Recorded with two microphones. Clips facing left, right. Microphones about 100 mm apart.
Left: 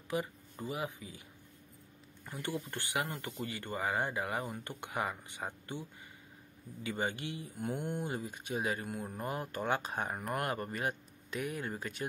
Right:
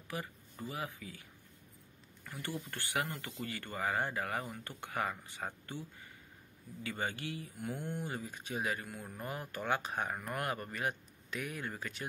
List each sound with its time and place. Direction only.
0.1 s speech: 20° left (ahead or behind)
2.2 s speech: 20° left (ahead or behind)